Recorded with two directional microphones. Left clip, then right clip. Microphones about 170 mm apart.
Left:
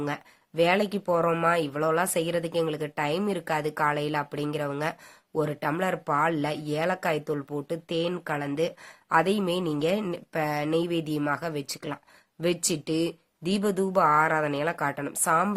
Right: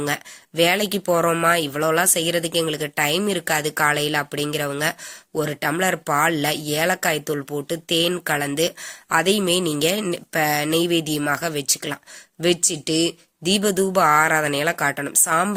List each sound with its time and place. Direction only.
0.0 s speech: 15° right (ahead or behind)